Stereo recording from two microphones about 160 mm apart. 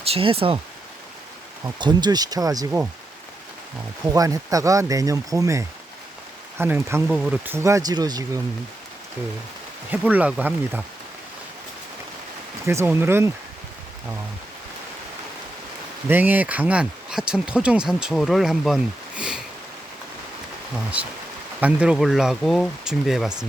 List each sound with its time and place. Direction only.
0.0 s speech: 35° right (ahead or behind)
1.6 s speech: 25° right (ahead or behind)
4.0 s speech: 20° right (ahead or behind)
9.9 s speech: 10° right (ahead or behind)
12.6 s speech: 15° right (ahead or behind)
16.0 s speech: 10° right (ahead or behind)
21.0 s speech: 10° right (ahead or behind)